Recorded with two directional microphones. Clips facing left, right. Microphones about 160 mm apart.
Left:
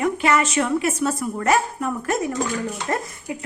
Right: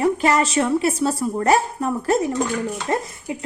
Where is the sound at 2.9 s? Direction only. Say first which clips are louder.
Right 3 dB; 20° right (ahead or behind).